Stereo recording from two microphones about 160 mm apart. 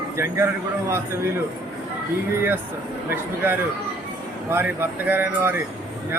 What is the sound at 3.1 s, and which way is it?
Speech, 15° right (ahead or behind).